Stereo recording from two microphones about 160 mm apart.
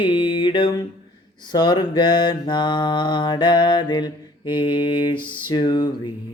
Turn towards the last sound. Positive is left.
turn(degrees=30)  # may be behind; listen again after turning